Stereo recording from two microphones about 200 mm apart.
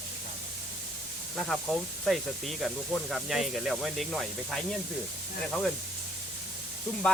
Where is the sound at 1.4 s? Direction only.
Centre (ahead or behind).